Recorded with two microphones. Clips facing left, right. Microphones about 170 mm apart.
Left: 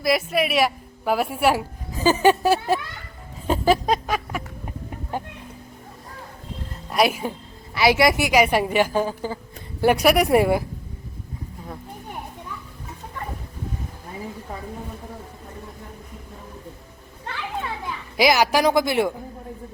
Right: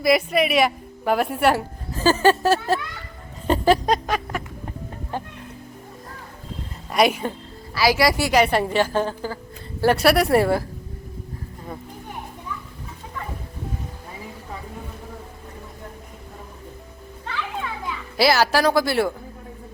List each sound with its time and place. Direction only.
0.0 s a woman's voice: centre (ahead or behind)
3.4 s a sound: 5° left (ahead or behind)
5.1 s chicken: 15° left (ahead or behind)
6.9 s a woman's voice: centre (ahead or behind)
7.7 s a woman's voice: 20° left (ahead or behind)
18.2 s a woman's voice: 15° left (ahead or behind)